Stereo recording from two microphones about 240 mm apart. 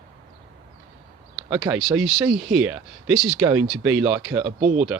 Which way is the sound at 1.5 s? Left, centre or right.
Centre.